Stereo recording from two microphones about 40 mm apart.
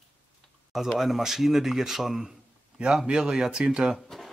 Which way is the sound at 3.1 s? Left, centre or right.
Centre.